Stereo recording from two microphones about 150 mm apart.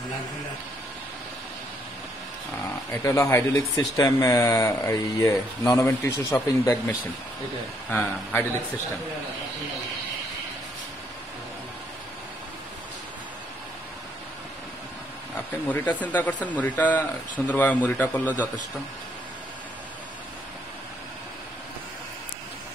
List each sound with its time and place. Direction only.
2.9 s speech: 20° left (ahead or behind)
15.7 s speech: 10° left (ahead or behind)